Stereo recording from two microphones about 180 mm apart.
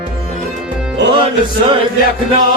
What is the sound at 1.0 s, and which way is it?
Music, 75° right (ahead or behind).